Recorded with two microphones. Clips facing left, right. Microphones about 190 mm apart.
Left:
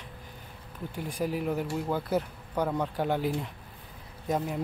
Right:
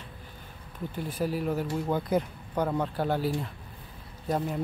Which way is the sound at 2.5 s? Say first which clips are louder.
Right 1 dB; 10° right (ahead or behind).